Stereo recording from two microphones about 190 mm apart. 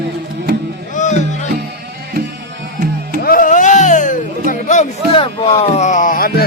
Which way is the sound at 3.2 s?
45° left (ahead or behind).